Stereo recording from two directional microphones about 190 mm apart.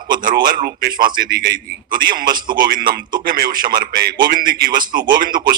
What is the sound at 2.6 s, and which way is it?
A man's voice, 50° right (ahead or behind).